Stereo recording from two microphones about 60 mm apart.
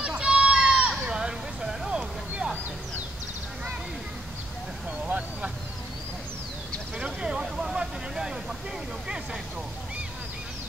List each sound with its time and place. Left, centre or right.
0.0 s run: centre
1.0 s vehicle: centre
5.0 s vehicle: right
7.0 s vehicle: centre